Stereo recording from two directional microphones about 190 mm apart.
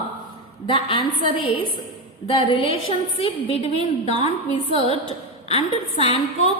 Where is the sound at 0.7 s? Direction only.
25° left (ahead or behind).